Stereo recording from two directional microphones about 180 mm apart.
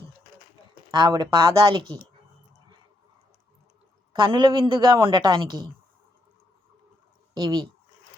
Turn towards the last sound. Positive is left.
turn(degrees=-25)  # may be behind; listen again after turning